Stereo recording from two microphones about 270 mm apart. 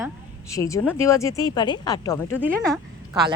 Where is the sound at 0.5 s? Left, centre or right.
Centre.